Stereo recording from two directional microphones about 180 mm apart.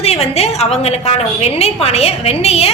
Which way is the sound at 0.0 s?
35° left (ahead or behind).